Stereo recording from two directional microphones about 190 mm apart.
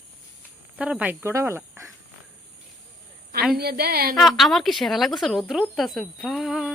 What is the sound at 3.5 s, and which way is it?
Speech, 55° right (ahead or behind).